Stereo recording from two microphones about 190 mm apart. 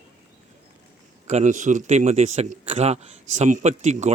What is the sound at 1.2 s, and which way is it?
A man's voice, 40° right (ahead or behind).